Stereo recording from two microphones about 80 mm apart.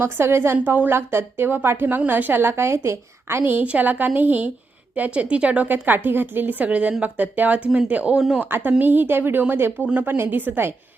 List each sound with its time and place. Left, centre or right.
0.0 s a woman's voice: right